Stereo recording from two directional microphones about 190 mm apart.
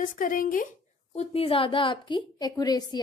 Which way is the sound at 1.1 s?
30° left (ahead or behind).